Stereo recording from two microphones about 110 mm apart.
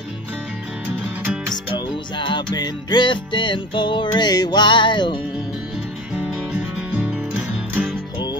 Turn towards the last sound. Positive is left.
turn(degrees=-10)  # may be behind; listen again after turning